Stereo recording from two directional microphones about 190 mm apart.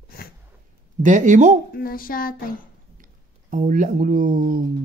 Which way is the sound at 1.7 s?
50° left (ahead or behind).